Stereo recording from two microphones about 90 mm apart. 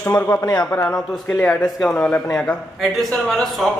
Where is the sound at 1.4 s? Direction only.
10° left (ahead or behind).